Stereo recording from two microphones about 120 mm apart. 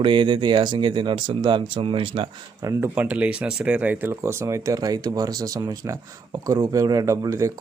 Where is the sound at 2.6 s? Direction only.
25° right (ahead or behind).